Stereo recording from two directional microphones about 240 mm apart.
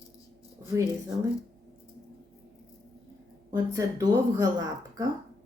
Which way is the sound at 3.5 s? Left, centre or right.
Centre.